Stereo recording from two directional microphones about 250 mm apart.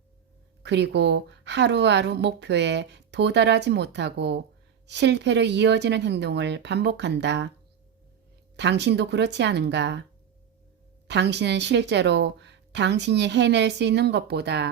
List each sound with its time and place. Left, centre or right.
0.6 s a woman's voice: right
8.5 s a woman's voice: right
11.1 s a woman's voice: right